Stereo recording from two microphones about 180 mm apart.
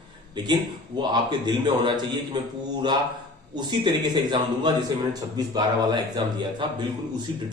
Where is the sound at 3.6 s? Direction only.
25° right (ahead or behind).